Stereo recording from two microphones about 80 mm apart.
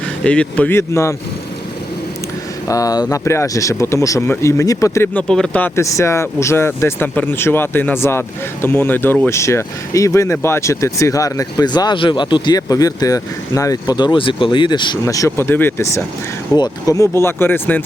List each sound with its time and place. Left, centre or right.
0.3 s a man's voice: centre
0.7 s speech: left
2.6 s speech: left
5.1 s a man's voice: centre
5.7 s speech: left
11.6 s speech: left
12.5 s speech: left
15.0 s speech: left
15.4 s speech: left
16.6 s speech: left
17.2 s speech: left